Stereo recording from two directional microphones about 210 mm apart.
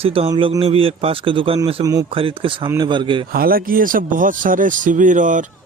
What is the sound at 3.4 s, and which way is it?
Speech, 45° right (ahead or behind).